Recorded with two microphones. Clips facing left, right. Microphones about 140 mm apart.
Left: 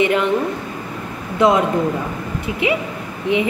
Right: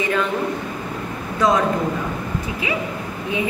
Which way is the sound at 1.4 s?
25° left (ahead or behind).